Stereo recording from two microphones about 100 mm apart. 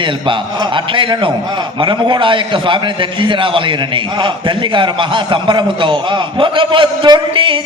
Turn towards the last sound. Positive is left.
turn(degrees=-60)  # may be behind; listen again after turning